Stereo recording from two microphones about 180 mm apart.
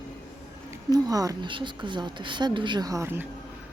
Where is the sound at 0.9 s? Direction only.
20° right (ahead or behind).